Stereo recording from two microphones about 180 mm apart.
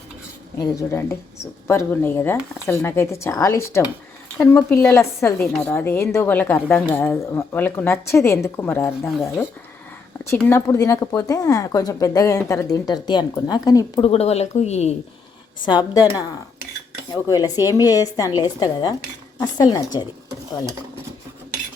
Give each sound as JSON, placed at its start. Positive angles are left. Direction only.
{"t": 0.6, "sound": "speech", "side_deg": 15}
{"t": 10.2, "sound": "speech", "side_deg": 10}
{"t": 14.1, "sound": "speech", "side_deg": 35}
{"t": 15.6, "sound": "speech", "side_deg": 25}